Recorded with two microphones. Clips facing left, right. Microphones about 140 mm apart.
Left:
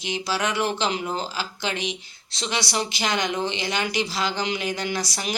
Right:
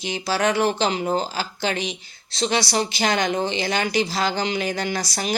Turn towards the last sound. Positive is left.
turn(degrees=-35)  # may be behind; listen again after turning